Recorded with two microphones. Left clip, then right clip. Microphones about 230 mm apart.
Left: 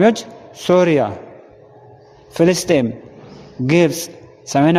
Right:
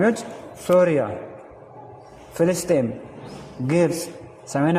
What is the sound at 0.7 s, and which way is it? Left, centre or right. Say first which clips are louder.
Speech: left 4 dB; left.